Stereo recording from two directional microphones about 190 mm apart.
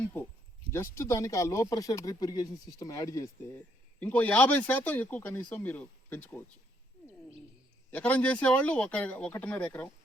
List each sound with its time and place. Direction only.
0.7 s speech: 15° left (ahead or behind)
7.9 s speech: 5° left (ahead or behind)